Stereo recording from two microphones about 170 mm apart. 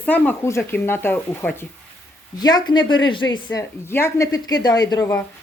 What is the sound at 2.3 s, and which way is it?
A woman's voice, 25° left (ahead or behind).